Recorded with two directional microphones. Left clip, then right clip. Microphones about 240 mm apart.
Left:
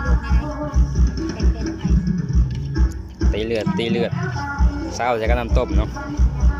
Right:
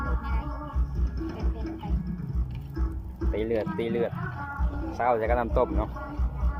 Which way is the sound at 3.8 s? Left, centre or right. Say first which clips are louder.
Left 6 dB; left.